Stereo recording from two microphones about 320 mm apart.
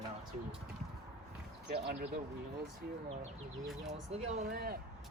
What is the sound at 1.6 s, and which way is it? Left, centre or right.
Speech, right.